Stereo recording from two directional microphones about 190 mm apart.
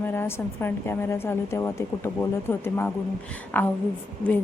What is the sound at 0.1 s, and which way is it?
A woman's voice, 10° left (ahead or behind).